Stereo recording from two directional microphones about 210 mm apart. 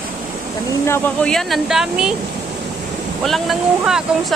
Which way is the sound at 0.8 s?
10° left (ahead or behind).